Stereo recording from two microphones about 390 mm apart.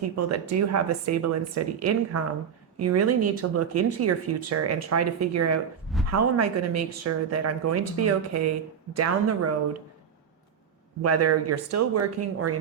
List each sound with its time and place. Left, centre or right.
0.0 s speech: right
11.0 s speech: right